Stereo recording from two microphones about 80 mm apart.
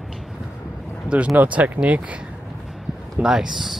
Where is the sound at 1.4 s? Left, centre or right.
Centre.